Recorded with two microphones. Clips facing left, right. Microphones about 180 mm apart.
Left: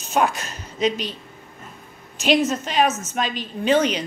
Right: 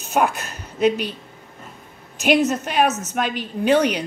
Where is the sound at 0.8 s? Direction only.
10° right (ahead or behind).